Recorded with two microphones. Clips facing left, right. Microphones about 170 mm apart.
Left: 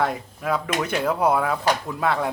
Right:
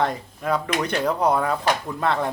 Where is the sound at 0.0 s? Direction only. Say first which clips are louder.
Even; 5° left (ahead or behind).